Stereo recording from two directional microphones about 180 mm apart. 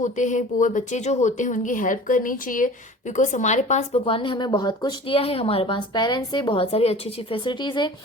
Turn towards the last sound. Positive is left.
turn(degrees=25)  # may be behind; listen again after turning